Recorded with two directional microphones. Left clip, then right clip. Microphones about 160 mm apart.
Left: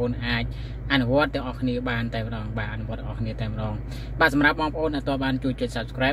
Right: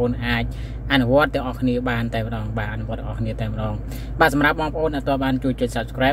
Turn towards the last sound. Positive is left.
turn(degrees=-10)  # may be behind; listen again after turning